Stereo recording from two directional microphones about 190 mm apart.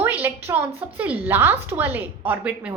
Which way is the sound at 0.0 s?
10° right (ahead or behind).